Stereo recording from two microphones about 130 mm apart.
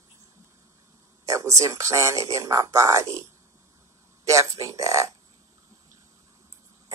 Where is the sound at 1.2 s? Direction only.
25° right (ahead or behind).